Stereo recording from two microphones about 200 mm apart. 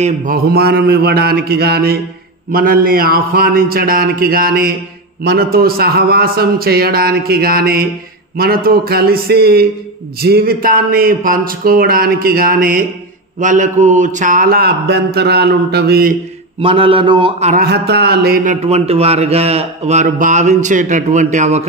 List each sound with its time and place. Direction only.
0.0 s a man's voice: 40° right (ahead or behind)
16.6 s a man's voice: 25° right (ahead or behind)
17.5 s a man's voice: 50° right (ahead or behind); by 21.6 s 35° right (ahead or behind)